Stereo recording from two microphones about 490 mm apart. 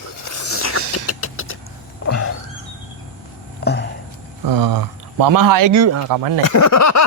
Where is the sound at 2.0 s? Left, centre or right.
Left.